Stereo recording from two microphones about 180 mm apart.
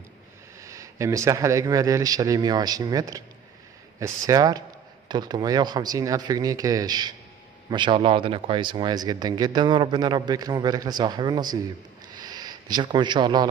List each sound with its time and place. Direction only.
0.7 s a man's voice: 15° right (ahead or behind)